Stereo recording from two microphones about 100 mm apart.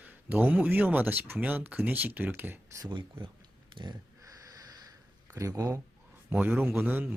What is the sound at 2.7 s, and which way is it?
Speech, 45° right (ahead or behind).